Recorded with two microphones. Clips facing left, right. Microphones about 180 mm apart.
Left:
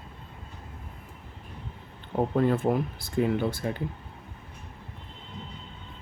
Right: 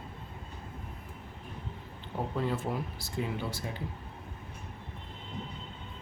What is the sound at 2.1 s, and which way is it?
Speech, 55° left (ahead or behind).